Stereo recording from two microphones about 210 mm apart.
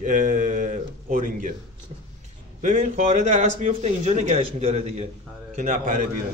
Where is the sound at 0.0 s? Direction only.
40° right (ahead or behind).